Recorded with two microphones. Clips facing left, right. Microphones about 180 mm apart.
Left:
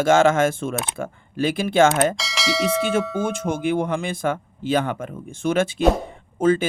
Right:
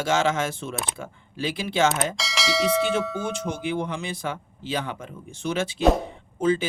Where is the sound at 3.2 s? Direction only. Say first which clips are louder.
Left 5 dB; 50° left (ahead or behind).